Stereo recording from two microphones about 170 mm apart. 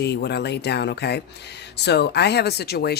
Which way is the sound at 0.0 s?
75° left (ahead or behind).